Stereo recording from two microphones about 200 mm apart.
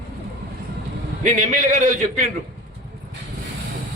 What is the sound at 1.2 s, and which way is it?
A man's voice, 40° right (ahead or behind).